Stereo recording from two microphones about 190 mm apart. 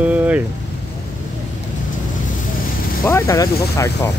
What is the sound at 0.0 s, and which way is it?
Vehicle, 10° right (ahead or behind).